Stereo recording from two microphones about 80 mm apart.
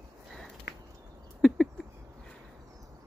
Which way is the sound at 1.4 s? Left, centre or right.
Centre.